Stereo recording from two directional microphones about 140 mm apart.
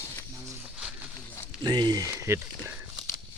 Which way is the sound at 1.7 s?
30° right (ahead or behind).